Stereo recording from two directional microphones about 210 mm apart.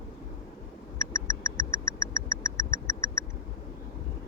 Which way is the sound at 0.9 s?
15° left (ahead or behind).